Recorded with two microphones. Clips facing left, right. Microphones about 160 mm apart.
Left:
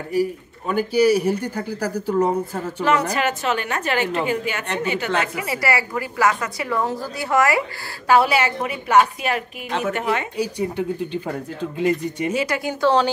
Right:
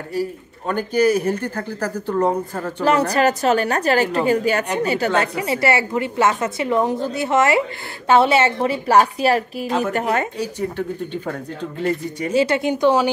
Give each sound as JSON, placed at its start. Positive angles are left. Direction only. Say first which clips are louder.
{"t": 0.1, "sound": "speech", "louder": "left 3 dB", "side_deg": 10}
{"t": 2.8, "sound": "a woman's voice", "louder": "right 4 dB", "side_deg": -35}
{"t": 9.7, "sound": "a woman's voice", "louder": "right 2 dB", "side_deg": -5}
{"t": 9.9, "sound": "a woman's voice", "louder": "right 3 dB", "side_deg": -40}
{"t": 10.3, "sound": "speech", "louder": "left 1 dB", "side_deg": 10}
{"t": 12.3, "sound": "a woman's voice", "louder": "right 7 dB", "side_deg": -30}